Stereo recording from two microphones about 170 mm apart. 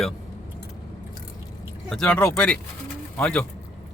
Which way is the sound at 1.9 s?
5° left (ahead or behind).